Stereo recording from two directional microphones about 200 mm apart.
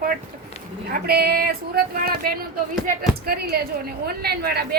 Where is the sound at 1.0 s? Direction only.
50° right (ahead or behind).